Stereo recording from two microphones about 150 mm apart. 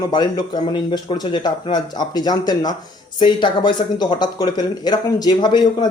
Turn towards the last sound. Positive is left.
turn(degrees=30)  # may be behind; listen again after turning